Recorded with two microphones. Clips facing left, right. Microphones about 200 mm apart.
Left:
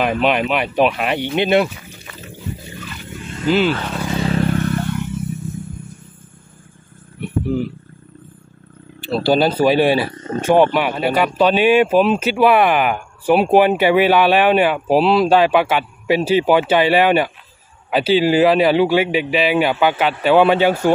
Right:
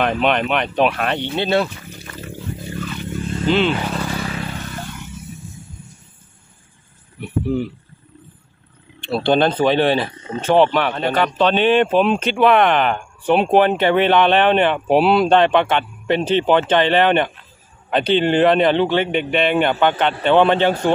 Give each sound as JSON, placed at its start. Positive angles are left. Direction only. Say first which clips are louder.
{"t": 0.0, "sound": "speech", "louder": "left 1 dB", "side_deg": 5}
{"t": 3.0, "sound": "vehicle", "louder": "right 4 dB", "side_deg": 5}
{"t": 4.0, "sound": "vehicle", "louder": "left 5 dB", "side_deg": 25}
{"t": 4.4, "sound": "vehicle", "louder": "left 10 dB", "side_deg": 60}
{"t": 7.2, "sound": "a sound", "louder": "left 1 dB", "side_deg": 0}
{"t": 9.0, "sound": "speech", "louder": "left 1 dB", "side_deg": 5}
{"t": 10.1, "sound": "wild animals", "louder": "left 4 dB", "side_deg": 45}
{"t": 10.4, "sound": "speech", "louder": "left 1 dB", "side_deg": 10}